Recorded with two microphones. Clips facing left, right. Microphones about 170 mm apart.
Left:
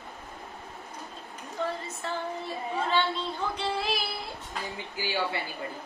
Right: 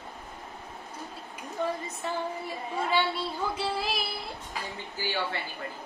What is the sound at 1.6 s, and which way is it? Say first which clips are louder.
A woman's voice: right 1 dB; 15° right (ahead or behind).